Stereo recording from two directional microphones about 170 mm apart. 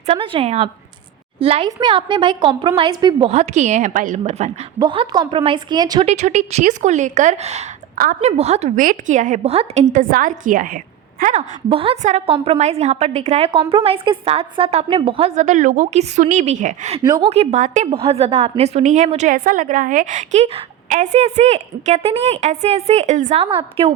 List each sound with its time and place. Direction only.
0.0 s a woman's voice: 35° right (ahead or behind)
4.8 s speech: 25° right (ahead or behind)
6.1 s a woman's voice: 40° right (ahead or behind)
11.2 s a woman's voice: 45° right (ahead or behind)
17.0 s speech: 25° right (ahead or behind)
17.2 s a woman's voice: 35° right (ahead or behind)